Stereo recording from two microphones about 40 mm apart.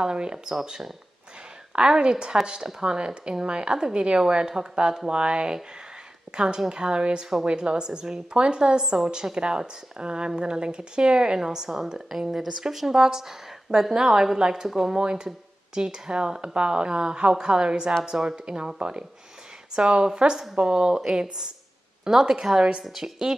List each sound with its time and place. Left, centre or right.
0.0 s a woman's voice: right
0.7 s a woman's voice: centre
1.7 s a woman's voice: right; by 12.4 s centre
12.4 s a woman's voice: centre
15.0 s a woman's voice: centre